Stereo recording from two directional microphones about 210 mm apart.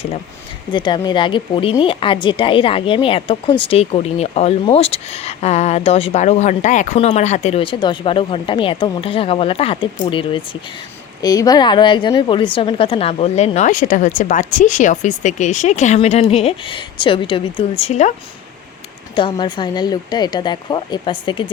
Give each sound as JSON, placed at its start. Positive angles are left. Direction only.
{"t": 0.7, "sound": "speech", "side_deg": 20}
{"t": 19.1, "sound": "speech", "side_deg": 20}